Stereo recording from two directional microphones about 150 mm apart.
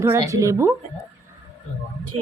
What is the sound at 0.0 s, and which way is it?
Speech, 20° right (ahead or behind).